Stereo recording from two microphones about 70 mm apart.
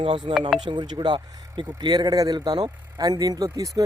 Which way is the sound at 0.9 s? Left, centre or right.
Right.